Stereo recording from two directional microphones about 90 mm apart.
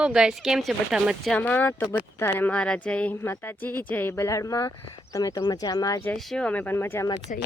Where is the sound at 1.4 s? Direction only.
20° left (ahead or behind); by 6.0 s 45° left (ahead or behind).